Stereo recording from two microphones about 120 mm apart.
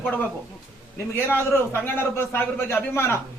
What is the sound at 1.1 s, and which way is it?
A man's voice, 20° left (ahead or behind).